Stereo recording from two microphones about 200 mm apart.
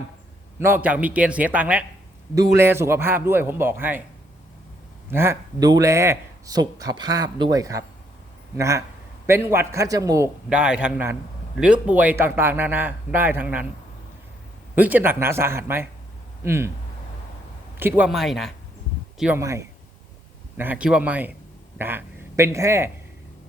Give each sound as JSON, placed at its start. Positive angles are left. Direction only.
{"t": 0.6, "sound": "a man's voice", "side_deg": -10}
{"t": 5.1, "sound": "a man's voice", "side_deg": -10}
{"t": 10.5, "sound": "a man's voice", "side_deg": -5}
{"t": 14.8, "sound": "a man's voice", "side_deg": -10}
{"t": 17.7, "sound": "speech", "side_deg": -10}
{"t": 19.2, "sound": "a man's voice", "side_deg": -10}